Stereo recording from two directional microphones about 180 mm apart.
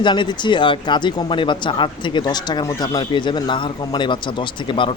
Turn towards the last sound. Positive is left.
turn(degrees=25)  # may be behind; listen again after turning